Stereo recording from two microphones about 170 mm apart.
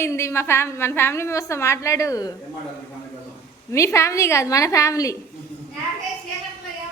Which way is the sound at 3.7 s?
15° left (ahead or behind).